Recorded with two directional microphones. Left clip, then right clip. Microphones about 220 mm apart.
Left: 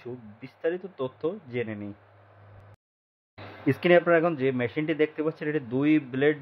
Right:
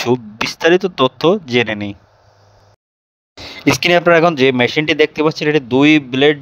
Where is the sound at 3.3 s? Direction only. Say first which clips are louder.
Right 13 dB; 45° right (ahead or behind).